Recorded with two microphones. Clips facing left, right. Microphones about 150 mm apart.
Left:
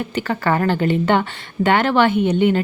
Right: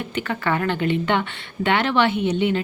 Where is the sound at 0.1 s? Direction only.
35° left (ahead or behind).